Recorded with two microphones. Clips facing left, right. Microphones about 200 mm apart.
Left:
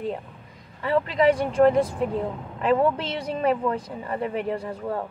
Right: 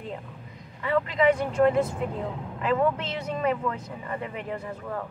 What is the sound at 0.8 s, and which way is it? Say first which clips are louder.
Speech: left 2 dB; 30° left (ahead or behind).